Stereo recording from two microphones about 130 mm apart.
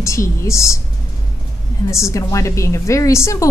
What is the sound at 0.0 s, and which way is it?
Speech, 25° left (ahead or behind).